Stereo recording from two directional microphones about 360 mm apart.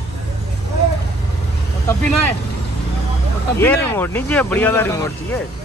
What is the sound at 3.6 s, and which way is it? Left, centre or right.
Speech, centre.